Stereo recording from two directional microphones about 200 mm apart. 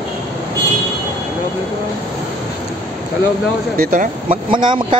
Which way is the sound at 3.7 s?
45° right (ahead or behind).